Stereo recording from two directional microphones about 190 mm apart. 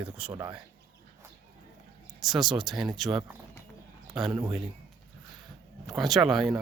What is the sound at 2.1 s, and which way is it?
Speech, centre (ahead or behind).